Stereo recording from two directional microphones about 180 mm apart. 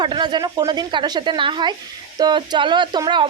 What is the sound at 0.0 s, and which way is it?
A woman's voice, 25° right (ahead or behind).